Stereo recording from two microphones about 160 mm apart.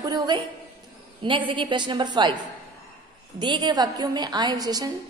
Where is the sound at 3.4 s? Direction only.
30° right (ahead or behind).